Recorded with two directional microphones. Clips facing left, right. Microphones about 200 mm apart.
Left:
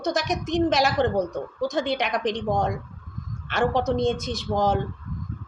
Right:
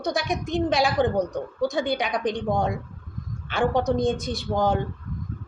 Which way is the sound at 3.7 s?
Centre (ahead or behind).